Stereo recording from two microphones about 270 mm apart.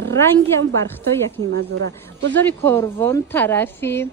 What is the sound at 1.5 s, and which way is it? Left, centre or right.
Speech, right.